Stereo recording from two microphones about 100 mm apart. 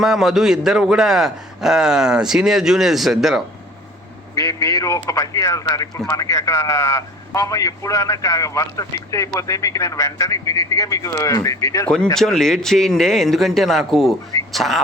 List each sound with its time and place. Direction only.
0.0 s a man's voice: 5° right (ahead or behind)
4.4 s a man's voice: 35° left (ahead or behind)
12.1 s a man's voice: 5° left (ahead or behind)